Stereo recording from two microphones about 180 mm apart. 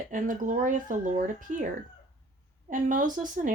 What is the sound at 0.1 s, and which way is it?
Speech, 45° right (ahead or behind).